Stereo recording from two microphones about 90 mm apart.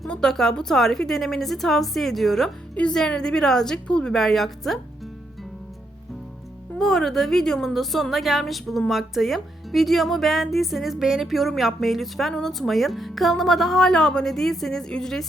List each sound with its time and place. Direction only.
0.0 s a woman's voice: 5° left (ahead or behind)
6.7 s speech: 5° left (ahead or behind)